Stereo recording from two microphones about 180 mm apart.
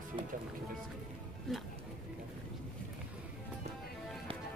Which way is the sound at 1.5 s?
Centre (ahead or behind).